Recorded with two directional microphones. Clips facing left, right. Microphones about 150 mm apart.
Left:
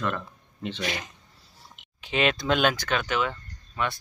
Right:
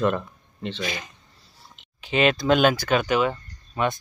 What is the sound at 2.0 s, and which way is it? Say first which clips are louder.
Speech: right 4 dB; centre (ahead or behind).